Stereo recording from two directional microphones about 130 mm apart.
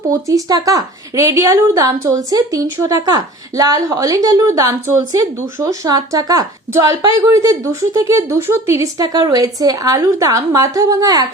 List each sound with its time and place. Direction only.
0.1 s a woman's voice: 25° right (ahead or behind)